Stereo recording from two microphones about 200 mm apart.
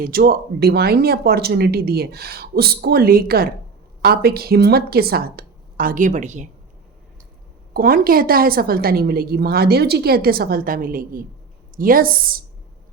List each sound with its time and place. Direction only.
0.0 s a woman's voice: 50° right (ahead or behind)
7.7 s a woman's voice: 45° right (ahead or behind)